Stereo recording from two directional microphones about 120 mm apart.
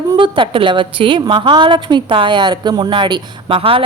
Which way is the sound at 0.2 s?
45° right (ahead or behind).